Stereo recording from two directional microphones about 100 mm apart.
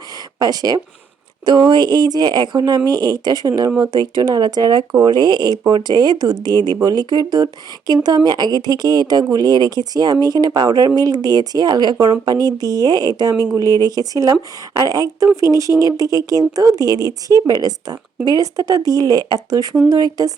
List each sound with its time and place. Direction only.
0.3 s speech: 40° right (ahead or behind)